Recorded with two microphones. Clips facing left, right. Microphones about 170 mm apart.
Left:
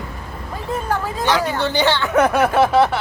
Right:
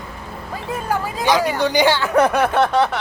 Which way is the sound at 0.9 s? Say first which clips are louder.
Right 2 dB; 10° right (ahead or behind).